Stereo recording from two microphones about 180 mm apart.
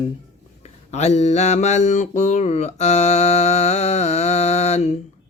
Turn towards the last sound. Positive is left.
turn(degrees=40)  # may be behind; listen again after turning